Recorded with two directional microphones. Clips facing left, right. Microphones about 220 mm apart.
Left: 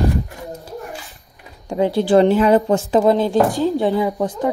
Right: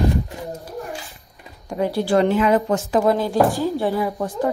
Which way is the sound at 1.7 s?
25° left (ahead or behind).